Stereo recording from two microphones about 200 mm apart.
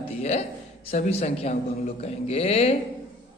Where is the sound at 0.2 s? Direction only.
30° left (ahead or behind).